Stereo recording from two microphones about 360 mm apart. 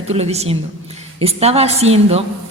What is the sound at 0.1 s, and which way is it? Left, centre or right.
A woman's voice, centre.